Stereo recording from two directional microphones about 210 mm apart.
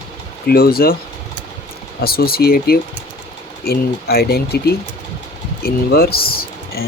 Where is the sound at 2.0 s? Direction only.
45° left (ahead or behind).